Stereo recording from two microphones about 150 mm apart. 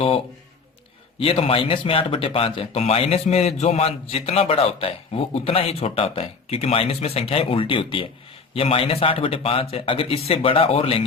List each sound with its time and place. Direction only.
1.2 s speech: 35° left (ahead or behind)